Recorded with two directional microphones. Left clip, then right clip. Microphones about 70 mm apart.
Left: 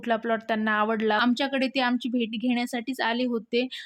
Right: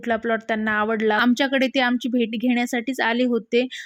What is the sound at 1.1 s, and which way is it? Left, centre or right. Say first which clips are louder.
Speech: right 5 dB; right.